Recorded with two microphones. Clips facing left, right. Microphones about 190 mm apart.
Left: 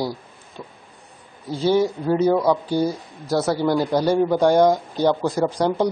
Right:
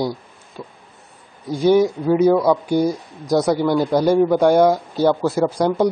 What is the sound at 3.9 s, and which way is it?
Speech, 10° right (ahead or behind).